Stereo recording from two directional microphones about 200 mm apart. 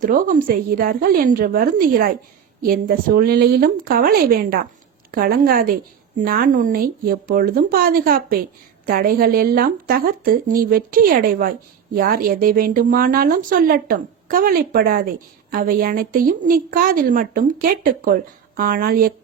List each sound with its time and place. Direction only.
0.0 s speech: 40° right (ahead or behind)